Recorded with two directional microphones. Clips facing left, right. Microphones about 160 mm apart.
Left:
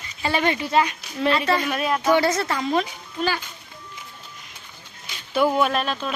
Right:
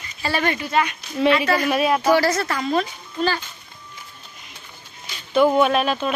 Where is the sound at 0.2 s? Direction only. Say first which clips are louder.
Even; 20° left (ahead or behind).